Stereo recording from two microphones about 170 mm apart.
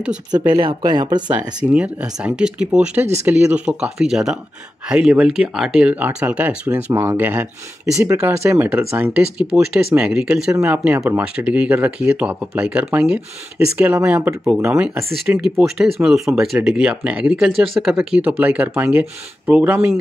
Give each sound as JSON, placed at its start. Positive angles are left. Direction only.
{"t": 0.3, "sound": "speech", "side_deg": -25}
{"t": 1.6, "sound": "speech", "side_deg": -5}
{"t": 15.4, "sound": "speech", "side_deg": -5}